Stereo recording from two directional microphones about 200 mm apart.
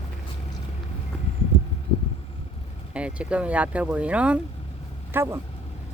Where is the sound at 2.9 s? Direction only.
5° right (ahead or behind).